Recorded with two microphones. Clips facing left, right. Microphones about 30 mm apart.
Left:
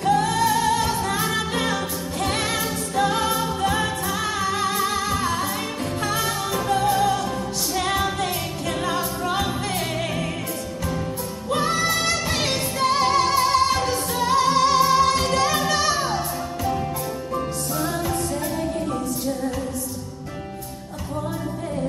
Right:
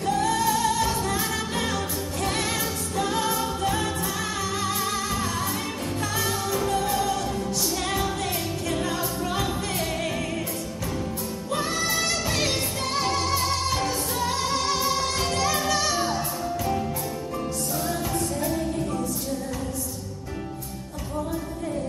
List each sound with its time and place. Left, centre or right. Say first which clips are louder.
0.0 s music: left 4 dB; left
11.5 s music: left 5 dB; left
17.7 s music: left 4 dB; centre